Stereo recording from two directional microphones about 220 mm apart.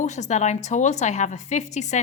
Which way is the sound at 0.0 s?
30° left (ahead or behind).